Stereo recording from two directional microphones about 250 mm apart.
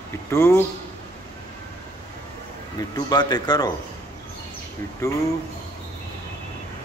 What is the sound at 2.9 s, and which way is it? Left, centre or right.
Speech, centre.